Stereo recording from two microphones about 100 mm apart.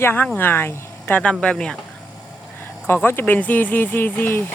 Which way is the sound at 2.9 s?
20° left (ahead or behind).